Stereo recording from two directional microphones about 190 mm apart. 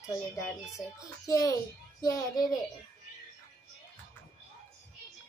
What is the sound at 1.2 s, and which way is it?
A child's voice, 15° left (ahead or behind).